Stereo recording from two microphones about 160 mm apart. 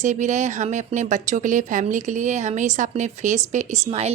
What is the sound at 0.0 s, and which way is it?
A woman's voice, 50° right (ahead or behind).